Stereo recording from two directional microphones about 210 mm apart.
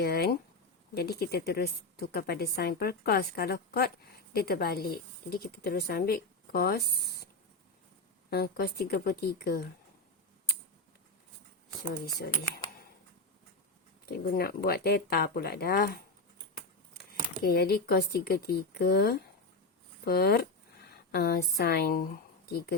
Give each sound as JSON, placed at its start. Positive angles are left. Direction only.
{"t": 0.0, "sound": "a sound", "side_deg": 50}
{"t": 0.9, "sound": "a woman's voice", "side_deg": 50}
{"t": 8.3, "sound": "a woman's voice", "side_deg": 50}
{"t": 12.2, "sound": "speech", "side_deg": 50}
{"t": 14.0, "sound": "a woman's voice", "side_deg": 45}
{"t": 17.4, "sound": "a woman's voice", "side_deg": 50}